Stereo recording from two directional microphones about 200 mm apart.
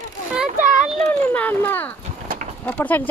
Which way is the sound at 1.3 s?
10° left (ahead or behind).